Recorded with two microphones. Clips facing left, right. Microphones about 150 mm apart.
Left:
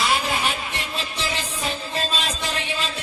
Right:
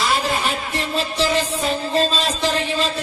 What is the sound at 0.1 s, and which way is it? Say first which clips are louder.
Music: right 3 dB; 40° right (ahead or behind).